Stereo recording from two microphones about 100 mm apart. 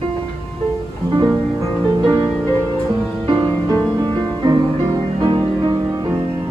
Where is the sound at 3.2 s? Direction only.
45° right (ahead or behind).